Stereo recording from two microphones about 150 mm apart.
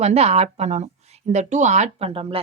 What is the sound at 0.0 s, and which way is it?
A woman's voice, 45° right (ahead or behind).